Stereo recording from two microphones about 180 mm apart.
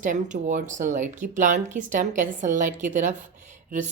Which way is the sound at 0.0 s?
45° right (ahead or behind).